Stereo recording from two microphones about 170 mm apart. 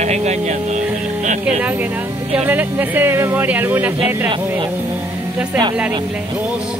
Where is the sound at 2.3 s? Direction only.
10° right (ahead or behind).